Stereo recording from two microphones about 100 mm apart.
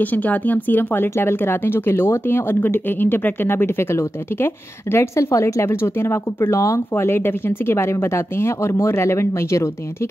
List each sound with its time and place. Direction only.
0.0 s a woman's voice: 15° left (ahead or behind)